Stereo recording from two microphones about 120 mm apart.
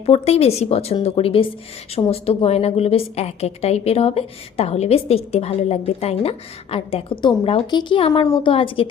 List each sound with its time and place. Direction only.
0.0 s a woman's voice: 55° left (ahead or behind)